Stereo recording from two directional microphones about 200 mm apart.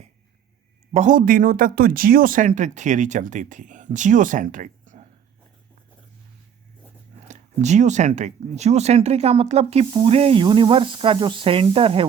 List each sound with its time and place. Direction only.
0.9 s speech: 40° right (ahead or behind)
7.3 s speech: 35° right (ahead or behind)